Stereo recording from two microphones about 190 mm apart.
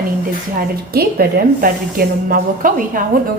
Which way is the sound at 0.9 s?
50° right (ahead or behind).